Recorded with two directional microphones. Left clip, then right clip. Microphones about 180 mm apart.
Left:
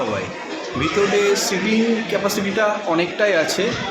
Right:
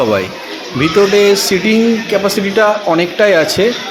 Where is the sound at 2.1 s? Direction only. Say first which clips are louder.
Right 7 dB; 35° right (ahead or behind).